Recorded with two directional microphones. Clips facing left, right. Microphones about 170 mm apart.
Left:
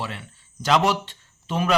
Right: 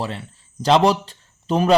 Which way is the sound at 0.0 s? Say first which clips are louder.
Right 5 dB; 35° right (ahead or behind).